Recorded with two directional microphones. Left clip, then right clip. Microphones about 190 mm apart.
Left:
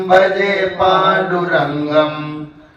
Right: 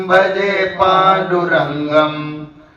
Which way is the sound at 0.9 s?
20° right (ahead or behind).